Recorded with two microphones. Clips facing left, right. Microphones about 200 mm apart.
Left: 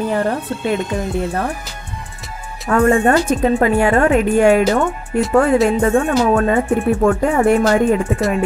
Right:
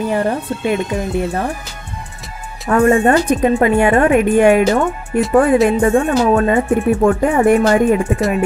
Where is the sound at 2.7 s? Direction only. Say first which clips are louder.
Right 1 dB; 15° right (ahead or behind).